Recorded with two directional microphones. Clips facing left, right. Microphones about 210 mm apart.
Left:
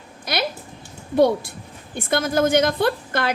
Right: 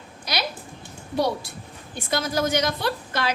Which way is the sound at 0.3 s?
55° left (ahead or behind).